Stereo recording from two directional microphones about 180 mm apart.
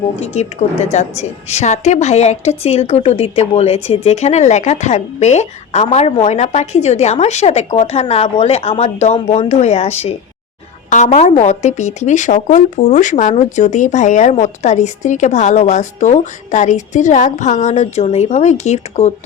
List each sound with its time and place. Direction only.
0.2 s a woman's voice: 40° left (ahead or behind)